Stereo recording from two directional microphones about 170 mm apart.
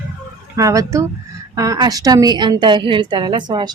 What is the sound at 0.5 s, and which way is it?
A woman's voice, 20° right (ahead or behind).